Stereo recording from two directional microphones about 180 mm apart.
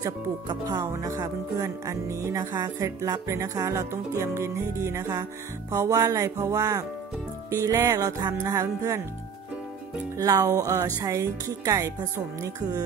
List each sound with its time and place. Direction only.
0.0 s speech: 20° right (ahead or behind)
10.1 s speech: 20° right (ahead or behind)